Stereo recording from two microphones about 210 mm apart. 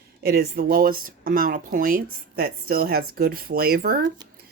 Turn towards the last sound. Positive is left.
turn(degrees=-45)  # may be behind; listen again after turning